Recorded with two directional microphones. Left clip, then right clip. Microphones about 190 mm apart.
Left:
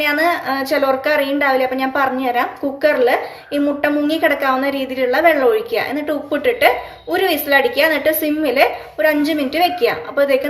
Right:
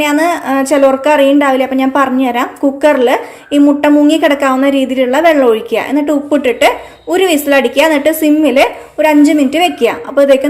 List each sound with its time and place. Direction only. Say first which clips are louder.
0.0 s a woman's voice: right 4 dB; 50° right (ahead or behind)